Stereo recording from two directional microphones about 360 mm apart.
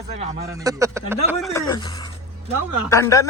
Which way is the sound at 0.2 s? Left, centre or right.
Centre.